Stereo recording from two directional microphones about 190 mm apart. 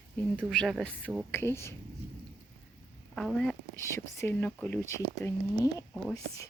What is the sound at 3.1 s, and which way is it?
Speech, centre (ahead or behind).